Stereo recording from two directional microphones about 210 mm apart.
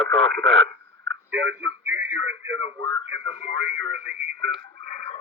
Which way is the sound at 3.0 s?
65° right (ahead or behind).